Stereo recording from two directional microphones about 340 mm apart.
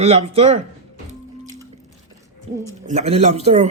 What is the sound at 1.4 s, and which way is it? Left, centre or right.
Squish, centre.